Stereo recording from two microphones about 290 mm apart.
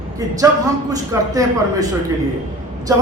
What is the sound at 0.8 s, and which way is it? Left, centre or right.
A man's voice, centre.